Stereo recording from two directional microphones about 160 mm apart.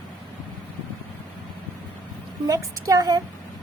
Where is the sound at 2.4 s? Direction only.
20° right (ahead or behind).